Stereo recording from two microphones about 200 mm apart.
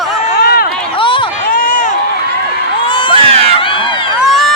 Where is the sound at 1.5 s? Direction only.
40° left (ahead or behind).